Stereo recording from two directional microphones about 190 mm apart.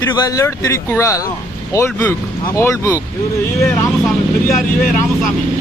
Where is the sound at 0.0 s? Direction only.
20° left (ahead or behind).